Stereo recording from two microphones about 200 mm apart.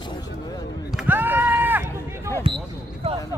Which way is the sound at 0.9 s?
5° right (ahead or behind).